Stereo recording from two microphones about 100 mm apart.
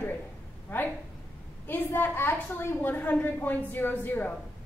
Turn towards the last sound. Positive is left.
turn(degrees=20)  # may be behind; listen again after turning